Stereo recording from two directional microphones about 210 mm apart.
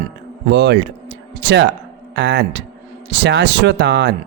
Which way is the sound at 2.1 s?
55° right (ahead or behind).